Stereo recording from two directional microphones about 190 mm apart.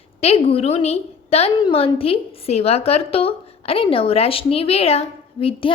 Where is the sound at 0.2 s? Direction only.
30° left (ahead or behind).